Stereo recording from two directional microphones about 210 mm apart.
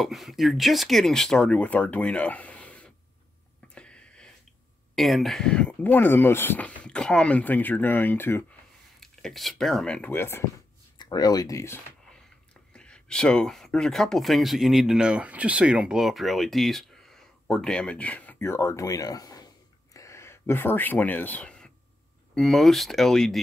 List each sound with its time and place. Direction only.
0.0 s speech: centre (ahead or behind)
3.6 s a sound: 5° left (ahead or behind)
4.9 s speech: centre (ahead or behind)